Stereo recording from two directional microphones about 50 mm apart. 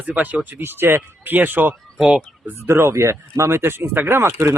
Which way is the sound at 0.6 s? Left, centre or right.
Right.